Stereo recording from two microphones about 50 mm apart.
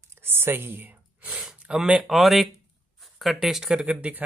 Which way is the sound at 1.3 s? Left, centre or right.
Centre.